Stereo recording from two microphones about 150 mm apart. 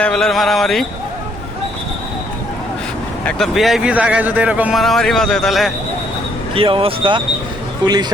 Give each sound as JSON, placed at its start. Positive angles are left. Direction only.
{"t": 0.0, "sound": "speech", "side_deg": 5}
{"t": 3.2, "sound": "speech", "side_deg": 0}
{"t": 4.8, "sound": "speech", "side_deg": 0}
{"t": 6.5, "sound": "speech", "side_deg": -35}